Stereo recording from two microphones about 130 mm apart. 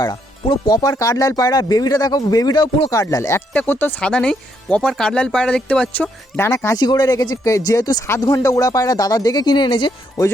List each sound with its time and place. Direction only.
0.0 s speech: 35° left (ahead or behind)
3.0 s speech: 25° left (ahead or behind)
3.5 s speech: 15° left (ahead or behind)
6.7 s speech: 30° left (ahead or behind)